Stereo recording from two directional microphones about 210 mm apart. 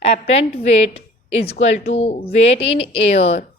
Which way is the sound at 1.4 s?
30° left (ahead or behind).